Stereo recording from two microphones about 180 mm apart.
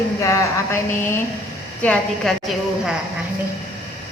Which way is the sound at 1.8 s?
Centre (ahead or behind).